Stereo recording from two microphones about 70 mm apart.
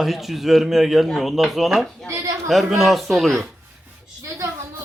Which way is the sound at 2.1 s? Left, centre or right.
Right.